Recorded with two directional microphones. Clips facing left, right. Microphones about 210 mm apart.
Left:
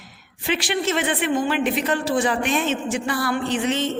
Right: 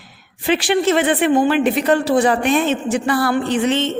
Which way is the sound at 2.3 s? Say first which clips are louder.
Right 5 dB; 40° right (ahead or behind).